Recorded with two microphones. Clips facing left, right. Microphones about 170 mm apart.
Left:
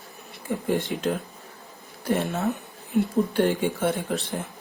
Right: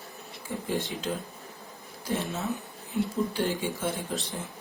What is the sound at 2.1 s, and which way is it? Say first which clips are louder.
Speech: left 6 dB; 60° left (ahead or behind).